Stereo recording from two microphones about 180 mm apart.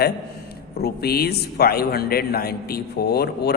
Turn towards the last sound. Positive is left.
turn(degrees=65)  # may be behind; listen again after turning